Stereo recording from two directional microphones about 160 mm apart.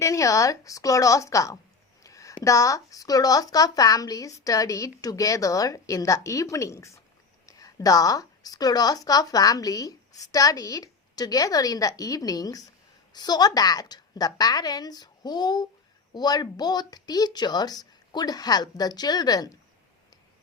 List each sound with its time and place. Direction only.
0.0 s a woman's voice: 20° left (ahead or behind)